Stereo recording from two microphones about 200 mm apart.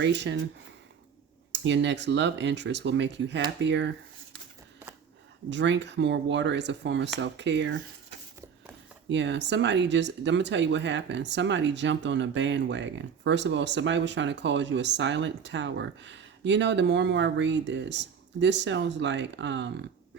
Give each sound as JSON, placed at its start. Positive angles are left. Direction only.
{"t": 0.0, "sound": "speech", "side_deg": -60}
{"t": 1.6, "sound": "speech", "side_deg": -60}
{"t": 5.5, "sound": "speech", "side_deg": -60}
{"t": 9.0, "sound": "speech", "side_deg": -65}